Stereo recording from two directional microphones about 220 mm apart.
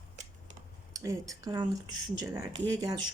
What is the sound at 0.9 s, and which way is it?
Speech, 15° right (ahead or behind).